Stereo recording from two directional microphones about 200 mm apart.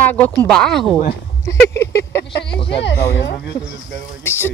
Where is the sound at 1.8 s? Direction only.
15° left (ahead or behind).